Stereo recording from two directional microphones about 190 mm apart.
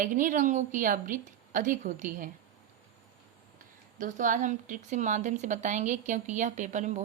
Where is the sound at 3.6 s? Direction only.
45° right (ahead or behind).